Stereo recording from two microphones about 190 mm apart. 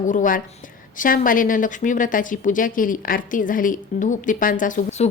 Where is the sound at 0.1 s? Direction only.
45° left (ahead or behind).